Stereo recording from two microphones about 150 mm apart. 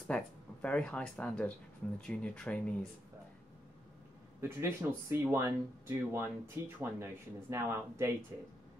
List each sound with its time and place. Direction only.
0.0 s speech: 10° left (ahead or behind)
4.4 s speech: 15° right (ahead or behind)